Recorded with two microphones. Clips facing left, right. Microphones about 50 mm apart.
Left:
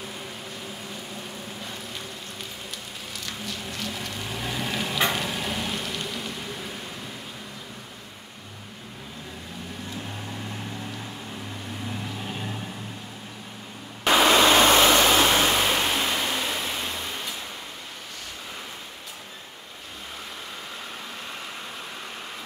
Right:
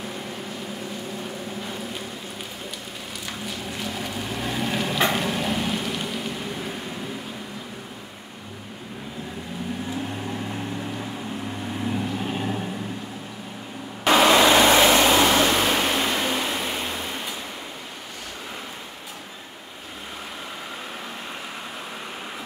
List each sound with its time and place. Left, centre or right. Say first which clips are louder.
3.3 s a sound: right 3 dB; centre
11.8 s vehicle: right 8 dB; centre
14.0 s vehicle: right 2 dB; centre
14.4 s vehicle: right 2 dB; right
15.3 s vehicle: right 2 dB; centre